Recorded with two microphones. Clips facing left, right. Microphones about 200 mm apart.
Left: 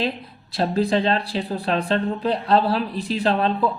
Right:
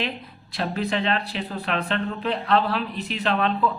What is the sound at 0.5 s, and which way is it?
A woman's voice, 30° left (ahead or behind).